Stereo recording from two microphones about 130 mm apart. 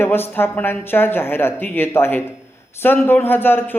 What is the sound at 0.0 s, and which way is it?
A man's voice, 15° left (ahead or behind).